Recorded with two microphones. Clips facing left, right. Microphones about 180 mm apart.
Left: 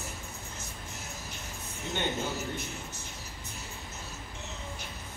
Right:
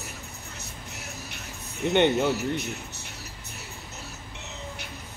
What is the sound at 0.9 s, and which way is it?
Music, 70° right (ahead or behind).